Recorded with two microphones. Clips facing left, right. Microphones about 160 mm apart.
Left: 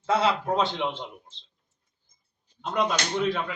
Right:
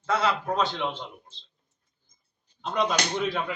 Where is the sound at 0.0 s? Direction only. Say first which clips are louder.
Left 2 dB; 25° left (ahead or behind).